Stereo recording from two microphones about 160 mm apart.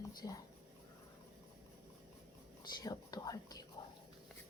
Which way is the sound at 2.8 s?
25° left (ahead or behind).